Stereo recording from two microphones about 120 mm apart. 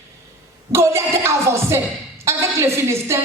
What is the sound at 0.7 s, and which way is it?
Speech, 25° right (ahead or behind).